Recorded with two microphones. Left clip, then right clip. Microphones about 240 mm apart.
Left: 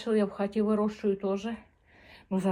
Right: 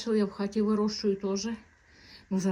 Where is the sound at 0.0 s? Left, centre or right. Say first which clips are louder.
Left 1 dB; centre.